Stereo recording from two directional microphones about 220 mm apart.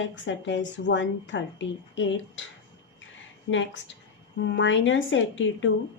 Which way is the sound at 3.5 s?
55° left (ahead or behind).